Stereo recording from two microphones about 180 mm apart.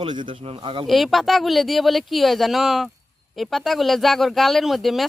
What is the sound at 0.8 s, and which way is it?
Speech, centre (ahead or behind).